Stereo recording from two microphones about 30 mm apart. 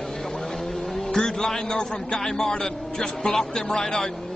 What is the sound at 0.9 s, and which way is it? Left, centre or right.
A man's voice, centre.